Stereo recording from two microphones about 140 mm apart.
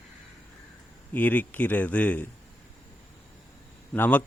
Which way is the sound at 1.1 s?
10° left (ahead or behind).